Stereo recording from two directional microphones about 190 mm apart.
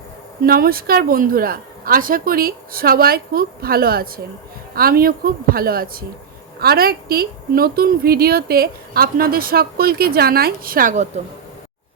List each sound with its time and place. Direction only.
0.4 s speech: 50° right (ahead or behind)